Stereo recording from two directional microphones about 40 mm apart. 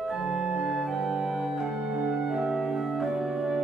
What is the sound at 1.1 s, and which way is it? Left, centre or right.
Music, centre.